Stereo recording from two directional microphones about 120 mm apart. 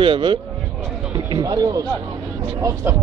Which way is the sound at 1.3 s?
35° right (ahead or behind).